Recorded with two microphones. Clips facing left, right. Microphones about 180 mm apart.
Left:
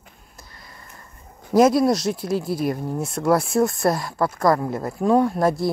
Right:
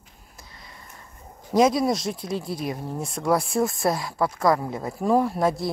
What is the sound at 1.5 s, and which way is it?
Speech, centre (ahead or behind).